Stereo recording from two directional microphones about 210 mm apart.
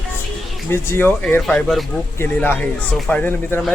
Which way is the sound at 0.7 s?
10° left (ahead or behind).